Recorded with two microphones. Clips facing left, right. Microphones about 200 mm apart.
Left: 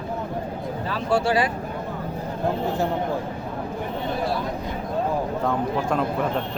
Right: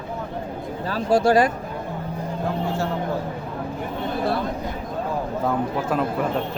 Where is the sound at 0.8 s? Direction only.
40° right (ahead or behind).